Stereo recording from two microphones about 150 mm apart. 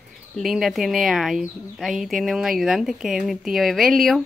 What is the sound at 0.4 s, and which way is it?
A woman's voice, centre (ahead or behind).